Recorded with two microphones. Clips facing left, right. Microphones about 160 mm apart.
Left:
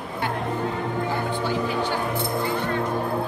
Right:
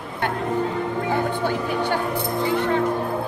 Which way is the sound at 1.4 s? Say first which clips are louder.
Right 2 dB; 55° right (ahead or behind).